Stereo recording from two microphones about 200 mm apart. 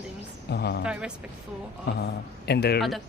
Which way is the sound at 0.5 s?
55° left (ahead or behind).